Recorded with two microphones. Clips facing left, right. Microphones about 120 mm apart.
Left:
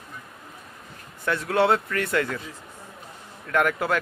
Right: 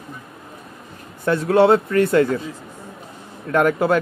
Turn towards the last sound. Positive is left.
turn(degrees=-30)  # may be behind; listen again after turning